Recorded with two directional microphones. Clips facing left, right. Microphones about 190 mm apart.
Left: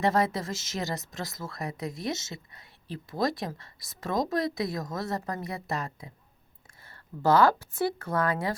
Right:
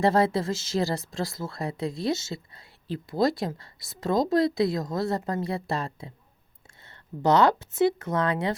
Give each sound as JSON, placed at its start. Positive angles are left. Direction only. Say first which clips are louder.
{"t": 0.0, "sound": "speech", "louder": "right 4 dB", "side_deg": -30}